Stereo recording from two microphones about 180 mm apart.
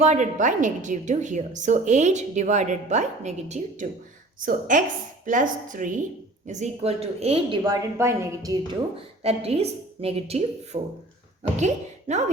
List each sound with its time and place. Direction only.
0.0 s a woman's voice: 40° right (ahead or behind)
7.6 s a woman's voice: 15° right (ahead or behind)
9.2 s a woman's voice: 35° right (ahead or behind)